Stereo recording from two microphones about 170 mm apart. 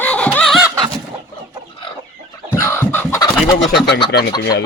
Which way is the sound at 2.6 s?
15° left (ahead or behind).